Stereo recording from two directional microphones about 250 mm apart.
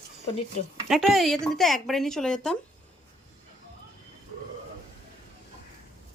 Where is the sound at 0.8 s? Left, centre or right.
Centre.